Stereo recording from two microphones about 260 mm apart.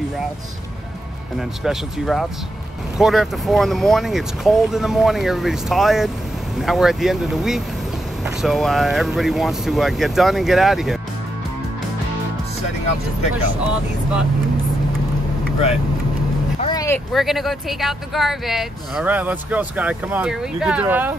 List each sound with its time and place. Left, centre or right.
1.6 s speech: centre
16.6 s vehicle: centre
17.1 s speech: centre